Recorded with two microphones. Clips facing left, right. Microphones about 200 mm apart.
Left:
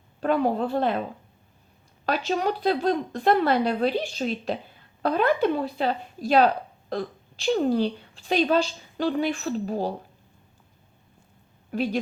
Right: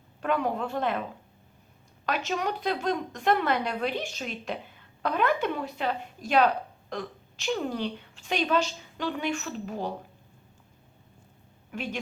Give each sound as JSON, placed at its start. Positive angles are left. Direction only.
{"t": 0.2, "sound": "speech", "side_deg": 35}
{"t": 2.0, "sound": "speech", "side_deg": 35}
{"t": 11.7, "sound": "a woman's voice", "side_deg": 35}